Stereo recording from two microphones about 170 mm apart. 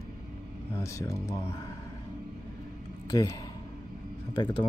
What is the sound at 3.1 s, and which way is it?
Speech, 20° left (ahead or behind).